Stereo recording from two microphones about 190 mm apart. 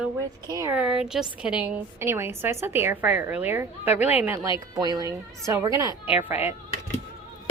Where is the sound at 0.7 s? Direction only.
5° right (ahead or behind).